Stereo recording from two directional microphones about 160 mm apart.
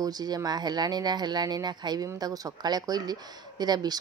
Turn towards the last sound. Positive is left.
turn(degrees=-25)  # may be behind; listen again after turning